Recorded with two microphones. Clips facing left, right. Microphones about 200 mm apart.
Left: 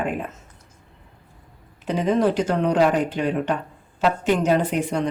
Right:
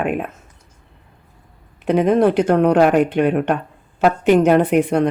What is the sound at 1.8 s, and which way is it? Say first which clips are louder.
Speech: right 6 dB; 60° right (ahead or behind).